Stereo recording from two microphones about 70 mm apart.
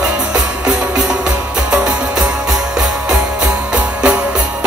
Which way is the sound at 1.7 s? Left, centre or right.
Centre.